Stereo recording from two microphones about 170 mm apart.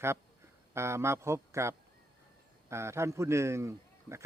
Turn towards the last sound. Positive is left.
turn(degrees=-15)  # may be behind; listen again after turning